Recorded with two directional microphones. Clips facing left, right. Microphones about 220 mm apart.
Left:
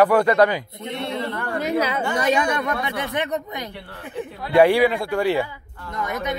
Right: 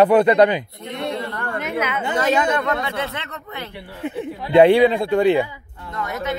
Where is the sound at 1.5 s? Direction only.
35° left (ahead or behind).